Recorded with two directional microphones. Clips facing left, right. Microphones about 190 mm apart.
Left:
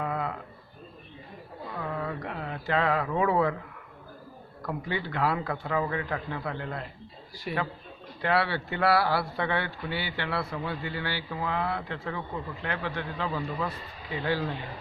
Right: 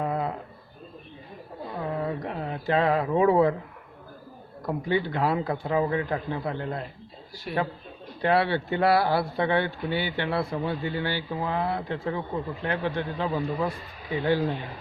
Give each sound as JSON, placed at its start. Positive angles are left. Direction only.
{"t": 0.0, "sound": "a sound", "side_deg": -25}
{"t": 1.6, "sound": "mantra", "side_deg": -20}
{"t": 4.6, "sound": "speech", "side_deg": -20}
{"t": 7.5, "sound": "speech", "side_deg": 5}
{"t": 8.2, "sound": "speech", "side_deg": -20}